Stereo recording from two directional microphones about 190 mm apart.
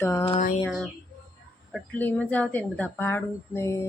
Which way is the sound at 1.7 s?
10° left (ahead or behind).